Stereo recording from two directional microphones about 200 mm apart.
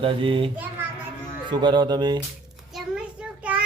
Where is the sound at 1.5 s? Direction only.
20° right (ahead or behind).